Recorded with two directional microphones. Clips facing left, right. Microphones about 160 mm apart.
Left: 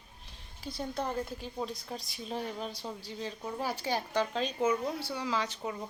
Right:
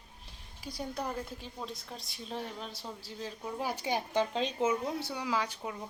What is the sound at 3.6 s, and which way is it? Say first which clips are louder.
A woman's voice: even; 20° right (ahead or behind).